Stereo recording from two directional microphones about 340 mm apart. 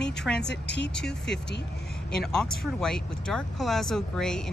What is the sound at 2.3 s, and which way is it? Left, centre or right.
Speech, centre.